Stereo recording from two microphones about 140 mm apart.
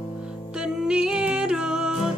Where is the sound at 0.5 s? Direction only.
5° right (ahead or behind).